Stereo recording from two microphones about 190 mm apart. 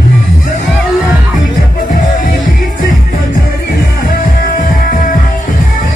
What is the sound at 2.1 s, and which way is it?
Music, 45° left (ahead or behind).